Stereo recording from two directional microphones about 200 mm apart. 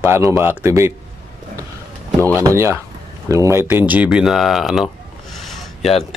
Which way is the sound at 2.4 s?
15° right (ahead or behind).